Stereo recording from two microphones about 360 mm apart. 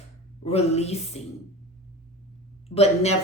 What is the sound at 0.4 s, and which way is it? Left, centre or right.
Speech, centre.